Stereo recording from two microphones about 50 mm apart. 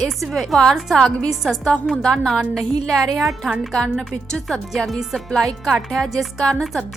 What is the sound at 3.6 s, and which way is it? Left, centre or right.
A woman's voice, centre.